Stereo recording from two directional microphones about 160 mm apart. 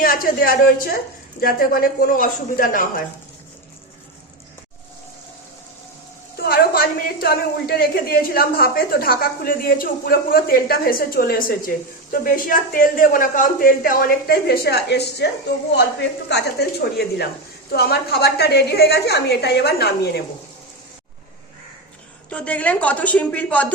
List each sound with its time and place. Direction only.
0.0 s a sound: 65° left (ahead or behind)
1.4 s speech: 70° left (ahead or behind)
6.3 s a woman's voice: 70° left (ahead or behind); by 17.2 s 90° left
17.7 s a woman's voice: 80° left
22.3 s a woman's voice: 10° left (ahead or behind)